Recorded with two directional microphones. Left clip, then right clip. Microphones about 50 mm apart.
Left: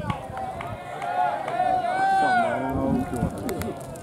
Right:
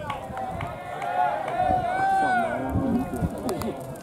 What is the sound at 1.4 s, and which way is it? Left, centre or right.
Run, centre.